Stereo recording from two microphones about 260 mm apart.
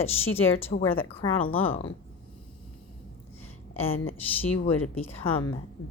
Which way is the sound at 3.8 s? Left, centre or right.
Left.